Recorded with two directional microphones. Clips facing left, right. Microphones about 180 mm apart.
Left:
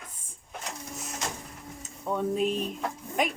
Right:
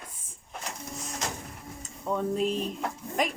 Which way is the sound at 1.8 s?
5° left (ahead or behind).